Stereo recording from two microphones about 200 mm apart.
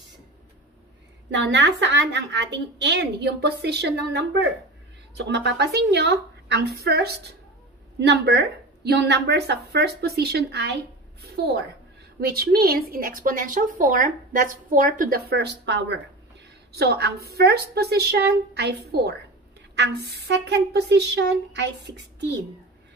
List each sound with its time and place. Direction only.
1.3 s a woman's voice: 65° right (ahead or behind)